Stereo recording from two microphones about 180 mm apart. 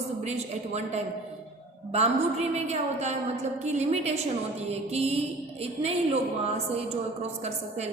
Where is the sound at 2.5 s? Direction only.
40° right (ahead or behind).